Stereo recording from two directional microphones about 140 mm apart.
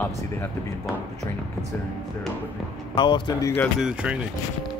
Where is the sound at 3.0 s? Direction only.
35° left (ahead or behind).